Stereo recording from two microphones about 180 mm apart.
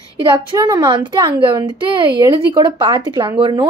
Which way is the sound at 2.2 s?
25° right (ahead or behind).